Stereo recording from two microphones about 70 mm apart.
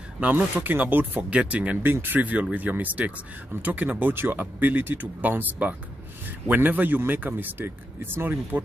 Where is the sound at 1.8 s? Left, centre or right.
Right.